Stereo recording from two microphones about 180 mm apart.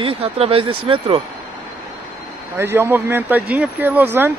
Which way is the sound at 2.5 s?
15° right (ahead or behind).